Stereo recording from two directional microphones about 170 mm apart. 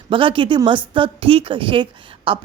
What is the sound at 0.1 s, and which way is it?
Speech, 30° right (ahead or behind).